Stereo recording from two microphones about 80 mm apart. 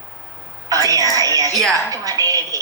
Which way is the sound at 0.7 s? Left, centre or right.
Right.